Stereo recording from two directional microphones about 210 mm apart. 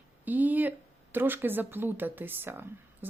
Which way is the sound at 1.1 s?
10° right (ahead or behind).